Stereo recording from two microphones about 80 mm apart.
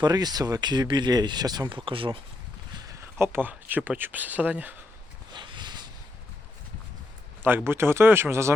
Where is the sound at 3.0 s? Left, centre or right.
Right.